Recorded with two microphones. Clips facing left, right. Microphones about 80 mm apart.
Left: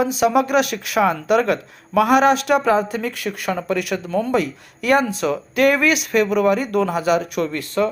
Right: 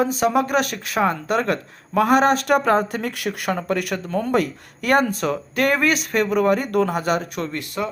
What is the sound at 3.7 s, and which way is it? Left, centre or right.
Speech, right.